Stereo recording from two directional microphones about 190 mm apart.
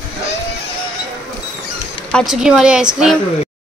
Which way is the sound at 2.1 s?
Centre (ahead or behind).